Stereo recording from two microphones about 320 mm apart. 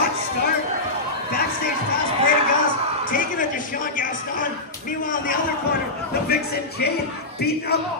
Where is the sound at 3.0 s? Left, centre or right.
Left.